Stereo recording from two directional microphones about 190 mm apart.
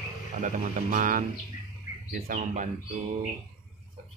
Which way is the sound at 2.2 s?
40° right (ahead or behind).